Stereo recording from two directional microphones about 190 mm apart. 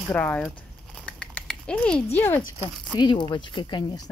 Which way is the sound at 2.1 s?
10° left (ahead or behind).